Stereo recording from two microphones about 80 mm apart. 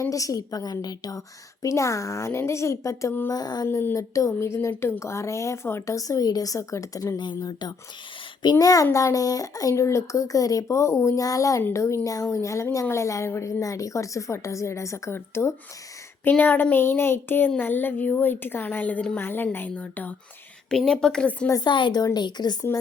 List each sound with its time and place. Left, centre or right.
0.0 s speech: left
1.6 s a woman's voice: left
3.2 s speech: left
3.7 s a woman's voice: left
7.2 s speech: left
8.4 s a woman's voice: left
16.3 s a woman's voice: centre
20.7 s a woman's voice: centre
21.6 s speech: left
22.0 s speech: left